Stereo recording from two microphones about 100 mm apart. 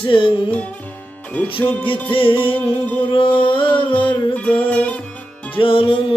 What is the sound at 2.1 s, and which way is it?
Music, 60° left (ahead or behind).